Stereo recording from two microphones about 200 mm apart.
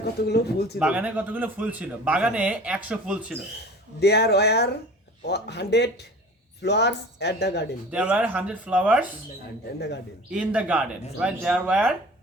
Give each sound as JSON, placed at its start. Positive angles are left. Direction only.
{"t": 0.3, "sound": "speech", "side_deg": 55}
{"t": 0.8, "sound": "a man's voice", "side_deg": -5}
{"t": 4.0, "sound": "speech", "side_deg": 55}
{"t": 7.9, "sound": "a man's voice", "side_deg": -5}
{"t": 10.3, "sound": "a man's voice", "side_deg": -5}